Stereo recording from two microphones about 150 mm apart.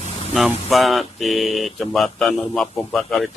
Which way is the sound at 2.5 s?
Centre (ahead or behind).